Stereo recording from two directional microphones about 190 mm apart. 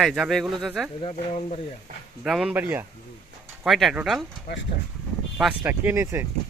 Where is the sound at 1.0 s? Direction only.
35° left (ahead or behind).